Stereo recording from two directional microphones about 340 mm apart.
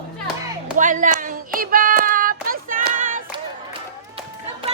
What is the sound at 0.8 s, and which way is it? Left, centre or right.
Child singing, right.